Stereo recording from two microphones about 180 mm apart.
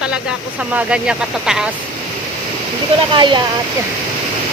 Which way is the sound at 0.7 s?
5° right (ahead or behind).